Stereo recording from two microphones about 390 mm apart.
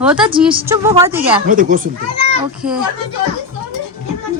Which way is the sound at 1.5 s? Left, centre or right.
Right.